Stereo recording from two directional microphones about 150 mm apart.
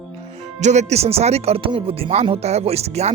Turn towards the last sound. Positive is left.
turn(degrees=-45)  # may be behind; listen again after turning